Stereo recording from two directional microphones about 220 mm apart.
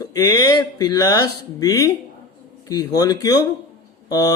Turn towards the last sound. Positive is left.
turn(degrees=15)  # may be behind; listen again after turning